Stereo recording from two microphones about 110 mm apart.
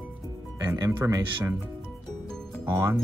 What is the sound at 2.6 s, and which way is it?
Speech, 20° right (ahead or behind).